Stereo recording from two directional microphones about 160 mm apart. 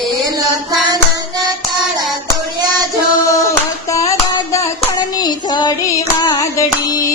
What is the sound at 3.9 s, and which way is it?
Hands, 20° left (ahead or behind).